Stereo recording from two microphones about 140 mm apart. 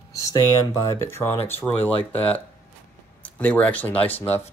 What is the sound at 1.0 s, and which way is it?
Speech, 15° left (ahead or behind).